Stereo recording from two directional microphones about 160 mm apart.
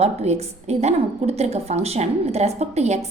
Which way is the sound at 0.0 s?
45° right (ahead or behind).